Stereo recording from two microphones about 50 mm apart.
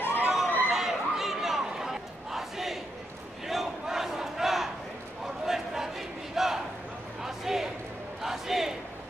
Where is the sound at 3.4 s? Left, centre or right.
Centre.